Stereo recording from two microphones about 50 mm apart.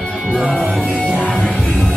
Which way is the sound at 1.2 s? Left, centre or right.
Left.